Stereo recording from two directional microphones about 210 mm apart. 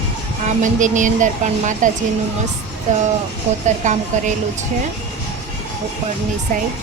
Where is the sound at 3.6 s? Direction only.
35° right (ahead or behind).